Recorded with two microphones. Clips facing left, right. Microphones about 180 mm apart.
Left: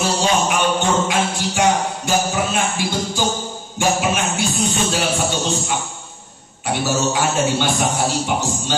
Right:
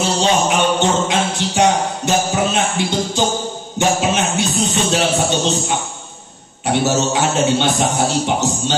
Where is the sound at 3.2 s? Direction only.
20° right (ahead or behind).